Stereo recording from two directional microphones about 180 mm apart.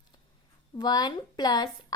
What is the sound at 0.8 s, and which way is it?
Speech, 25° left (ahead or behind).